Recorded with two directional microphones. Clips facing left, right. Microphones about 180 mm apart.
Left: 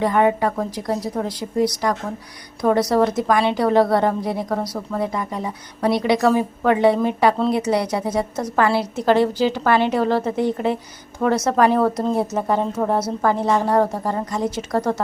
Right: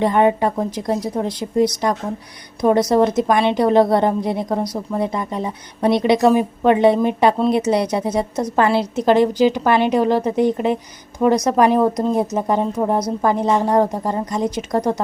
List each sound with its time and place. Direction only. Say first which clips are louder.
0.0 s a woman's voice: right 2 dB; 25° right (ahead or behind)